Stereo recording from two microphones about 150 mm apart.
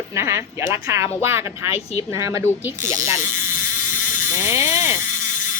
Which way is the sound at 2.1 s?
20° right (ahead or behind).